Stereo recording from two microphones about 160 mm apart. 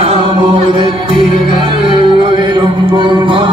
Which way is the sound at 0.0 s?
35° right (ahead or behind).